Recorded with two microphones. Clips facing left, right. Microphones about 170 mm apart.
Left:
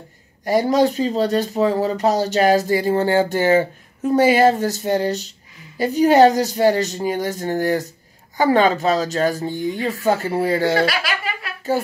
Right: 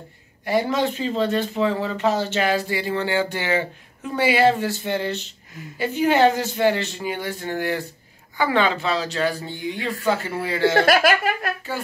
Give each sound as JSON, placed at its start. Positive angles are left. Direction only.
{"t": 0.5, "sound": "speech", "side_deg": 40}
{"t": 10.9, "sound": "speech", "side_deg": -50}
{"t": 11.7, "sound": "speech", "side_deg": 40}